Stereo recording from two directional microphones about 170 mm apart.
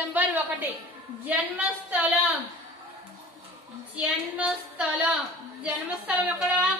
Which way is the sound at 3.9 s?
5° right (ahead or behind).